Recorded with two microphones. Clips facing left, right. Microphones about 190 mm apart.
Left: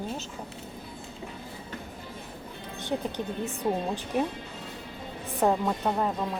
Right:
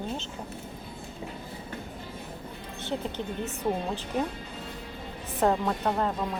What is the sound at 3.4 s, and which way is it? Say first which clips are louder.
Speech: left 1 dB; 15° left (ahead or behind).